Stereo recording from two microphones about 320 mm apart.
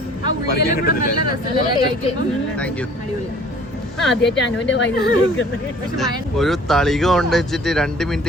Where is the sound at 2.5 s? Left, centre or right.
Centre.